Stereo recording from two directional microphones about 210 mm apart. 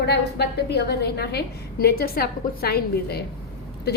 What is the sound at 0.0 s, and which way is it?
A woman's voice, 50° left (ahead or behind).